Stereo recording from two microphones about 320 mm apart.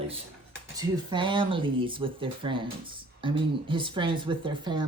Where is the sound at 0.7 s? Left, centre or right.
Centre.